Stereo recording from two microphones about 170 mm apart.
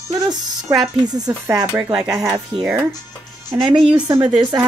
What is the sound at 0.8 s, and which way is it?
Speech, 25° right (ahead or behind).